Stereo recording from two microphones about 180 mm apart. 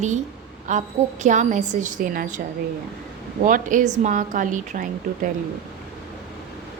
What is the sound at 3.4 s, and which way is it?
A woman's voice, 45° right (ahead or behind).